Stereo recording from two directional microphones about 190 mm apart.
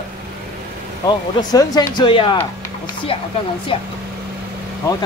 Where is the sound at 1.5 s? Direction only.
20° left (ahead or behind).